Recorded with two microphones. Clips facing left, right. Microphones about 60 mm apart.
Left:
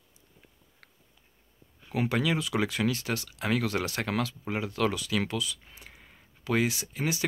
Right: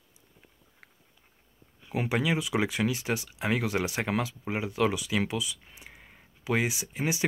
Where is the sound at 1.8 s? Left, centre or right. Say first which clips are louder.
Even; centre.